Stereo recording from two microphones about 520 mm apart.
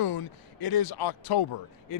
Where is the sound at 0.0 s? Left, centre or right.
Left.